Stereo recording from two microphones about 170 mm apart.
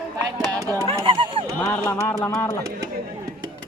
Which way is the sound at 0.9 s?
25° right (ahead or behind).